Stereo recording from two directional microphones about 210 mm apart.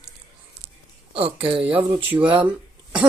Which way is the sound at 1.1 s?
25° right (ahead or behind).